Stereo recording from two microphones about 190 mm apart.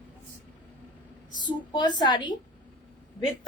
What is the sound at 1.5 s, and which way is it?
Speech, 25° left (ahead or behind).